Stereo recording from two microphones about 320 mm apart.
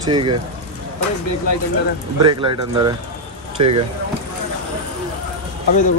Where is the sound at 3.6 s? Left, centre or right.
Right.